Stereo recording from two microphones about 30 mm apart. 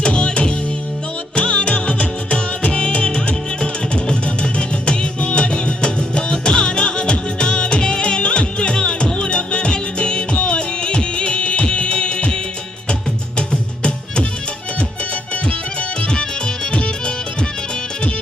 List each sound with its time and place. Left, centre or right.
0.0 s music: left